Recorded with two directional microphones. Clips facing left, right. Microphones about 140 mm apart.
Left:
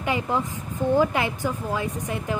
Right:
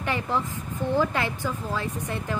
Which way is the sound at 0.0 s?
15° left (ahead or behind).